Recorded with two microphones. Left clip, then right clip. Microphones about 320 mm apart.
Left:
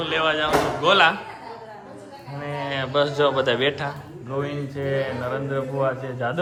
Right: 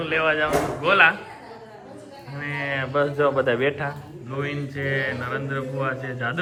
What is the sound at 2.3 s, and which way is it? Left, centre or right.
A man's voice, centre.